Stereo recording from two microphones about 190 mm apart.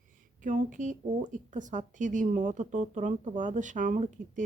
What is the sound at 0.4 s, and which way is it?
A woman's voice, 40° right (ahead or behind).